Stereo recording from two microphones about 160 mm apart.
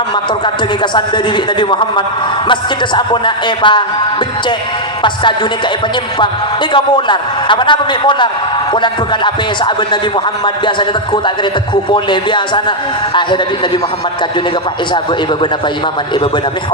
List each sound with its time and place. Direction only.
0.4 s a man's voice: 30° left (ahead or behind)
5.0 s a man's voice: 30° left (ahead or behind)